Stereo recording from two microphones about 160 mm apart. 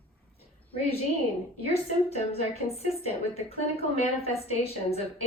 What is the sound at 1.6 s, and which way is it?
A woman's voice, 40° left (ahead or behind).